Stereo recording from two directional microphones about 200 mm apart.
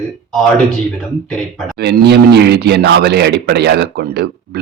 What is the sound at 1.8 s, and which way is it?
Speech, 55° right (ahead or behind).